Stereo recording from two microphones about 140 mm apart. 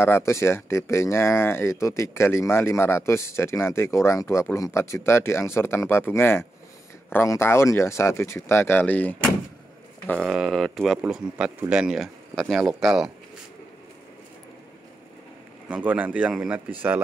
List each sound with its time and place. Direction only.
0.0 s speech: 20° left (ahead or behind)
10.2 s speech: 5° right (ahead or behind)
15.7 s speech: 10° right (ahead or behind)